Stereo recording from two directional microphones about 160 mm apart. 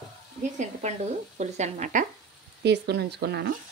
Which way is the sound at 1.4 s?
45° right (ahead or behind).